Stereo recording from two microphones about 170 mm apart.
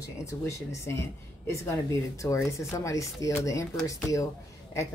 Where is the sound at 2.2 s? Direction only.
15° left (ahead or behind).